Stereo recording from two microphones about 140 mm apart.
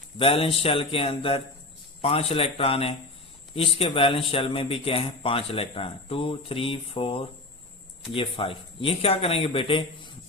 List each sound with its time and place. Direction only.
0.2 s speech: 40° left (ahead or behind)